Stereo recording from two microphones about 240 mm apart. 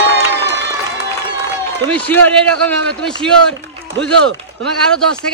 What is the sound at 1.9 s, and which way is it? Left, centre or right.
A man's voice, centre.